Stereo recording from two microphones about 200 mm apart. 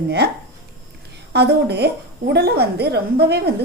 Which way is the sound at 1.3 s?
55° right (ahead or behind).